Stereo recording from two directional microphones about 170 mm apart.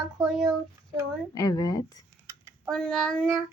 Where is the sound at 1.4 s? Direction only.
20° left (ahead or behind).